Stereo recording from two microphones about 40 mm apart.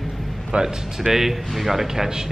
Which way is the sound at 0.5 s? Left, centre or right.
Right.